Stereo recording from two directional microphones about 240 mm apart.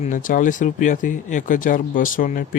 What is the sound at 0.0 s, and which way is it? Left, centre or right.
Speech, left.